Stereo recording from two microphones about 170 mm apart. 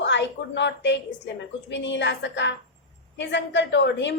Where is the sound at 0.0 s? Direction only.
90° left.